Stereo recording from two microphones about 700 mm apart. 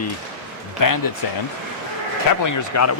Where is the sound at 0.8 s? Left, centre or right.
Left.